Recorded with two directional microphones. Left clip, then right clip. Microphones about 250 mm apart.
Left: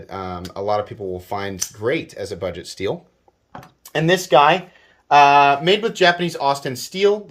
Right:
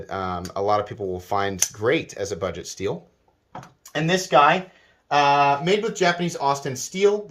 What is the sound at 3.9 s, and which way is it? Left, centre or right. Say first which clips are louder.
Speech: left 5 dB; left.